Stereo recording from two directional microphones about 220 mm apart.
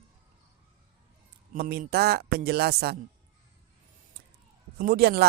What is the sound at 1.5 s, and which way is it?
Speech, 40° right (ahead or behind).